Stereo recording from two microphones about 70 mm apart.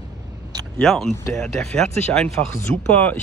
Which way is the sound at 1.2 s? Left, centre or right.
Left.